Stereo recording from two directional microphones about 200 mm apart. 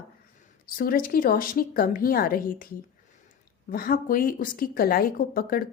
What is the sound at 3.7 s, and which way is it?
A woman's voice, 45° left (ahead or behind).